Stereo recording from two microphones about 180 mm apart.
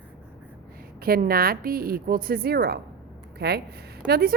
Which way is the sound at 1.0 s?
55° right (ahead or behind).